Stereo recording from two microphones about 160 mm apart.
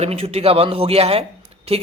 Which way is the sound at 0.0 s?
40° right (ahead or behind).